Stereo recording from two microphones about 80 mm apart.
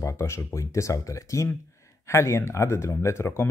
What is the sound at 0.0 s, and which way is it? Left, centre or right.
Speech, left.